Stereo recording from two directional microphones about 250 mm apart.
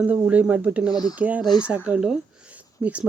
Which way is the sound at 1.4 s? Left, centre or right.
Centre.